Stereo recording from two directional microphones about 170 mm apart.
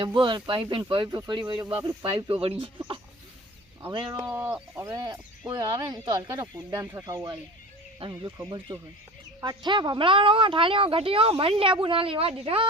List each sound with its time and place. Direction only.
0.0 s speech: 30° right (ahead or behind)
2.1 s speech: 35° right (ahead or behind)
9.4 s a woman's voice: 25° right (ahead or behind)